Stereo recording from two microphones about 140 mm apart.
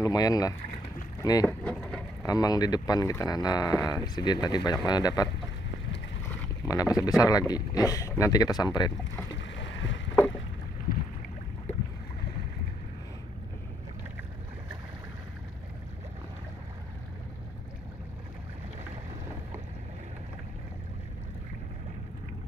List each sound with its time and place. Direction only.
0.0 s speech: 25° left (ahead or behind)
1.6 s speech: 5° left (ahead or behind)
2.2 s speech: 25° left (ahead or behind)